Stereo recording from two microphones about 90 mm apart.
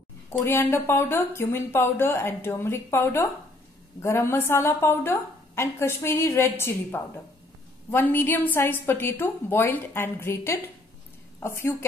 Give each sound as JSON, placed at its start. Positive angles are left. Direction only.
{"t": 0.3, "sound": "a woman's voice", "side_deg": 25}